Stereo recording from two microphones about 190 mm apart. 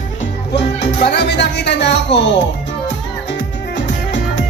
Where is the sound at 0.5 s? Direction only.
65° left (ahead or behind).